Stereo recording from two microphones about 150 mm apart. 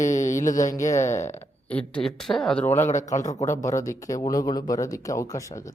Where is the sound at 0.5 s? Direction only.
25° left (ahead or behind).